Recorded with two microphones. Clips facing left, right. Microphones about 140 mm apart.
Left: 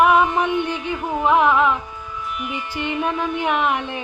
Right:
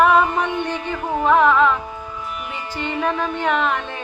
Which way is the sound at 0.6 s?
55° right (ahead or behind).